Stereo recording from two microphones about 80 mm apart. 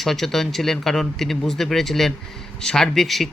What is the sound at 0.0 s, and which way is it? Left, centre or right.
A man's voice, centre.